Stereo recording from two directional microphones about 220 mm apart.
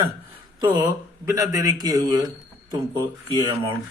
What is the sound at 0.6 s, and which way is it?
Speech, 20° right (ahead or behind).